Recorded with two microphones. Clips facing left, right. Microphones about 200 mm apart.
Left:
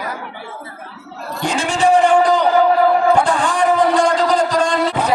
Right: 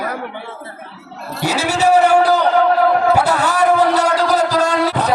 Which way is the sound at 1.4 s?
5° right (ahead or behind).